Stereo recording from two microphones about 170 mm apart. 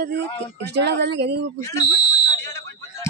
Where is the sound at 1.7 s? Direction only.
25° left (ahead or behind).